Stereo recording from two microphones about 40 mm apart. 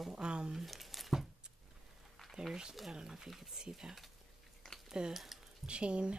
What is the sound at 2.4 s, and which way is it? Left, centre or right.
Speech, centre.